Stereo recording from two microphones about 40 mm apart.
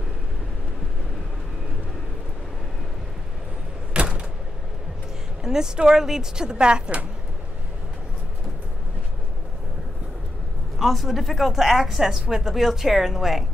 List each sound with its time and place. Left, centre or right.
3.9 s door: right
5.4 s speech: centre
10.8 s a woman's voice: centre